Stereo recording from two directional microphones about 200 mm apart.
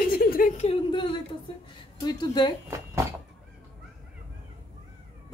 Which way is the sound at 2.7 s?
15° right (ahead or behind).